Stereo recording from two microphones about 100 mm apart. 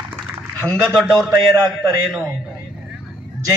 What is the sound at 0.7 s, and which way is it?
Speech, centre (ahead or behind).